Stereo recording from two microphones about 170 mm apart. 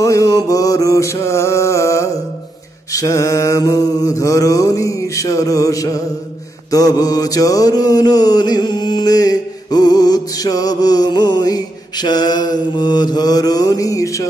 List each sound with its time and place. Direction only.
0.0 s mantra: 20° left (ahead or behind)